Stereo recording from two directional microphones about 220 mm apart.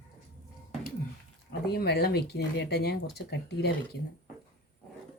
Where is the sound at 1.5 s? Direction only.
45° left (ahead or behind).